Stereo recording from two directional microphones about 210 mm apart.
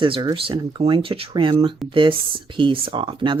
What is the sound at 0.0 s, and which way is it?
Speech, 20° right (ahead or behind).